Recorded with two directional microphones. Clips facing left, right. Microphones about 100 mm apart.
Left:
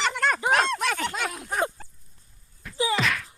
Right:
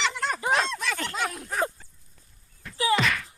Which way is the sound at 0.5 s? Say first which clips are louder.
Left 3 dB; 55° left (ahead or behind).